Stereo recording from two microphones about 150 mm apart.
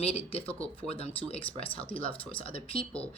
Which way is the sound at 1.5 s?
10° left (ahead or behind).